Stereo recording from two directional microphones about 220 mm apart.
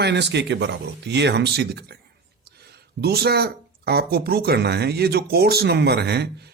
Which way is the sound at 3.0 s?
45° right (ahead or behind).